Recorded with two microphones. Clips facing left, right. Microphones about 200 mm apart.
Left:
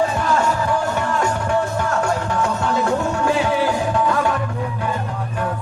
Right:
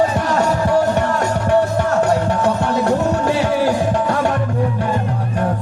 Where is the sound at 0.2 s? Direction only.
40° right (ahead or behind).